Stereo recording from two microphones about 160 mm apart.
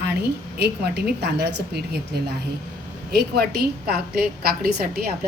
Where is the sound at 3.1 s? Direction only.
80° right.